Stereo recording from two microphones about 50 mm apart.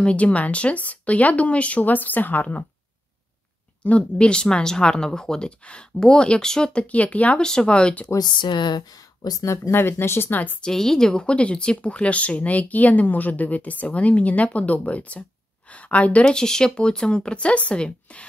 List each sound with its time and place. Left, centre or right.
0.0 s speech: left
3.8 s speech: left
7.3 s speech: centre
9.7 s speech: left
10.3 s a woman's voice: left
10.6 s a woman's voice: centre; by 16.3 s left
16.3 s speech: centre